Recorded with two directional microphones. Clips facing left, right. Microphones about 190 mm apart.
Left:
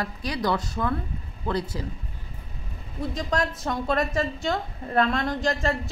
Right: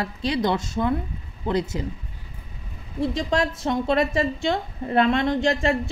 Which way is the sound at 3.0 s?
25° right (ahead or behind).